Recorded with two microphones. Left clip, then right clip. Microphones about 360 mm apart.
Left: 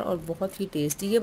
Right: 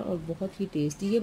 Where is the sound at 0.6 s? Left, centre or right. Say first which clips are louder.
Left 2 dB; centre.